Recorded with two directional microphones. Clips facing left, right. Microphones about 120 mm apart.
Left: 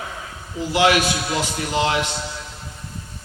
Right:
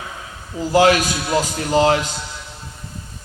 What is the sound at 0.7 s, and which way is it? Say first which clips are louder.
A man's voice: right 3 dB; 40° right (ahead or behind).